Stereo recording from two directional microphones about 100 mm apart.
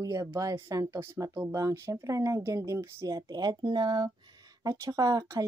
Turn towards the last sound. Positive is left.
turn(degrees=-35)  # may be behind; listen again after turning